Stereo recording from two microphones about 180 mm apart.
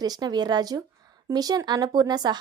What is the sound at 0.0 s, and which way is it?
Speech, 20° right (ahead or behind).